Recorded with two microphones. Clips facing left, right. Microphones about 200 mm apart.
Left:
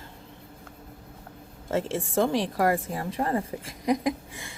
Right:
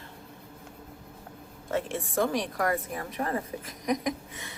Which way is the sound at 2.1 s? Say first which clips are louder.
Left 3 dB; 30° left (ahead or behind).